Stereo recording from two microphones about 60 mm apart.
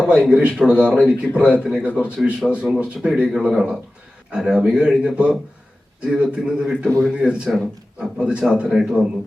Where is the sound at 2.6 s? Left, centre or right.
Centre.